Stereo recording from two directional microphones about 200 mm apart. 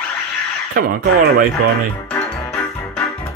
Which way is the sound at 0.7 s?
50° right (ahead or behind).